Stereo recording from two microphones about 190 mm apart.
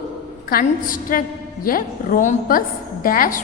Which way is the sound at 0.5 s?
45° left (ahead or behind).